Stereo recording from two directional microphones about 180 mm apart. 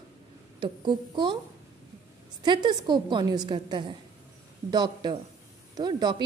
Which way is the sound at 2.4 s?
25° right (ahead or behind).